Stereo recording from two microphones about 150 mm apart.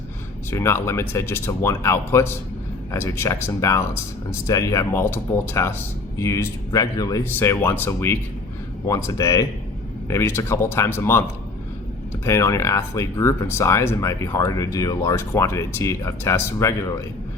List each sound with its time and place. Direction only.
0.5 s speech: 15° left (ahead or behind)